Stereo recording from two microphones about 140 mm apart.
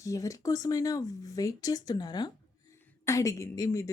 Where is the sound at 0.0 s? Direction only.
25° left (ahead or behind).